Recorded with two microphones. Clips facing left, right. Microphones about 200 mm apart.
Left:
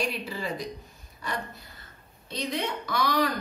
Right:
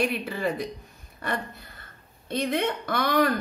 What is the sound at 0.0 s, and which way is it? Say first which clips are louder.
Speech: right 5 dB; 55° right (ahead or behind).